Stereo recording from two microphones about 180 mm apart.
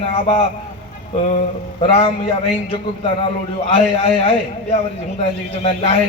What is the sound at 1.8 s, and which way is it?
A man's voice, 30° left (ahead or behind).